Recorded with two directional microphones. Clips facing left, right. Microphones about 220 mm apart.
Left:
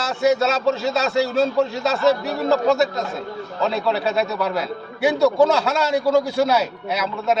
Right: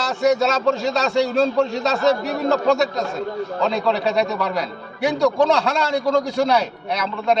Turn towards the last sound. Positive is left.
turn(degrees=5)  # may be behind; listen again after turning